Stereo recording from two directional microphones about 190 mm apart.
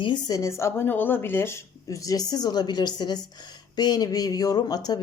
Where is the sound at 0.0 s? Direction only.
20° left (ahead or behind).